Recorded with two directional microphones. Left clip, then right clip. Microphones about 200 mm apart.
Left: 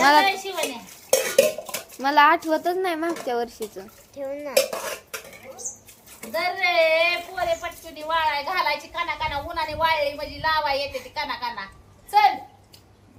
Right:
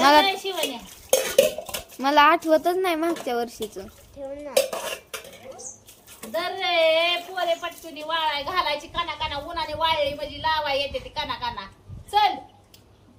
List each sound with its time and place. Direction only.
0.3 s dishes: centre (ahead or behind)
2.0 s speech: 15° right (ahead or behind)
4.2 s dishes: 60° left (ahead or behind)
4.5 s dishes: centre (ahead or behind)
6.2 s a woman's voice: centre (ahead or behind)